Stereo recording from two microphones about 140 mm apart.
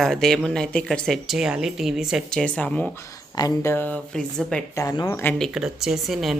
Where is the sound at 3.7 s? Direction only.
10° left (ahead or behind).